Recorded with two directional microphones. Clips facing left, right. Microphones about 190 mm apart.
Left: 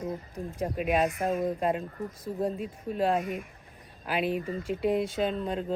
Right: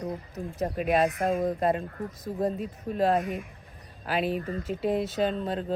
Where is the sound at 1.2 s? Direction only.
10° right (ahead or behind).